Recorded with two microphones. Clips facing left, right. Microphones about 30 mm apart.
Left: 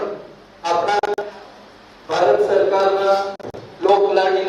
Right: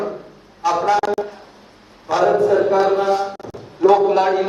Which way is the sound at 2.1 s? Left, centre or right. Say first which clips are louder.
Right 1 dB; left.